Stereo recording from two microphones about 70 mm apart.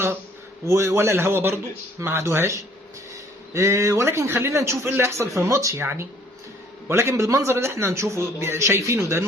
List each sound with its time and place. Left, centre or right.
0.6 s a man's voice: right
5.8 s a man's voice: right